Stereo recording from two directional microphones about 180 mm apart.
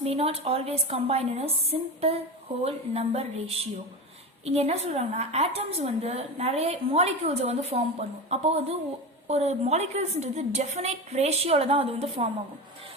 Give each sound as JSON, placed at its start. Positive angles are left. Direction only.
{"t": 0.0, "sound": "a woman's voice", "side_deg": -35}
{"t": 2.6, "sound": "a woman's voice", "side_deg": -35}